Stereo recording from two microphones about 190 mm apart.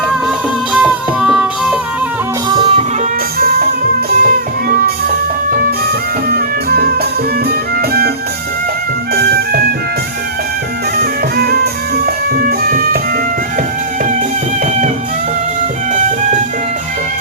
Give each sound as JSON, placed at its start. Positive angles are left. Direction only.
{"t": 0.7, "sound": "music", "side_deg": -5}
{"t": 2.5, "sound": "music", "side_deg": -25}
{"t": 3.3, "sound": "music", "side_deg": -55}
{"t": 10.9, "sound": "music", "side_deg": -55}